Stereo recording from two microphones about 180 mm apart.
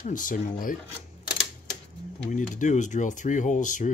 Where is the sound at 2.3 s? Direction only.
45° left (ahead or behind).